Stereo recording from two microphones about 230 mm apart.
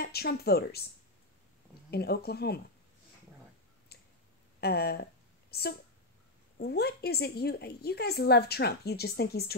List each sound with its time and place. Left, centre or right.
0.0 s a woman's voice: left
1.9 s a woman's voice: left
3.9 s tick: left
4.6 s a sound: left
6.6 s a woman's voice: left